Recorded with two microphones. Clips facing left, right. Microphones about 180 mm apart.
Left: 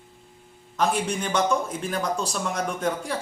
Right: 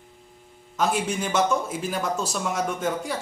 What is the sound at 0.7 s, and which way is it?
Speech, 5° right (ahead or behind).